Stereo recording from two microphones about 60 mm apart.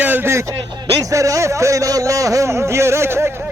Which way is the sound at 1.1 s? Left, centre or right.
Right.